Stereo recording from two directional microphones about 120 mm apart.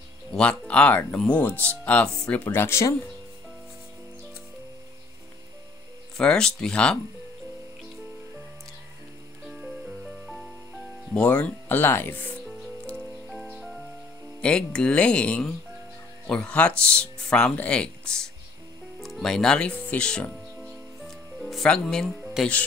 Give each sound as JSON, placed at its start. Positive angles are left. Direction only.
{"t": 0.3, "sound": "speech", "side_deg": 10}
{"t": 6.1, "sound": "speech", "side_deg": 5}
{"t": 9.5, "sound": "music", "side_deg": 0}
{"t": 11.2, "sound": "speech", "side_deg": 15}
{"t": 13.3, "sound": "music", "side_deg": 0}
{"t": 14.4, "sound": "speech", "side_deg": 5}
{"t": 21.0, "sound": "music", "side_deg": 0}